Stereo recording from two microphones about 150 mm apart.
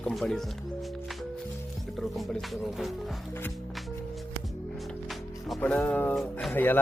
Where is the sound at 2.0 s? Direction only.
Centre (ahead or behind).